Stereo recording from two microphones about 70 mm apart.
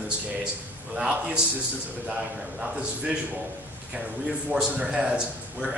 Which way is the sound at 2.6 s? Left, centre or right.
Centre.